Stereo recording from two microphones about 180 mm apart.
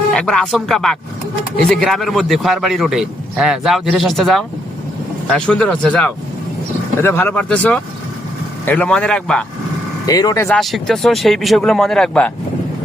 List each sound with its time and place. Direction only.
0.1 s a man's voice: 5° left (ahead or behind)
10.1 s speech: 20° left (ahead or behind)
10.5 s a man's voice: centre (ahead or behind)